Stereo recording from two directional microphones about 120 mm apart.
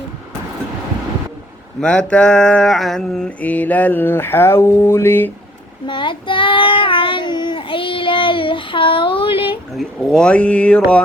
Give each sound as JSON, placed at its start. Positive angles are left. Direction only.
{"t": 1.8, "sound": "mantra", "side_deg": 10}
{"t": 5.8, "sound": "child singing", "side_deg": 40}
{"t": 9.7, "sound": "mantra", "side_deg": 5}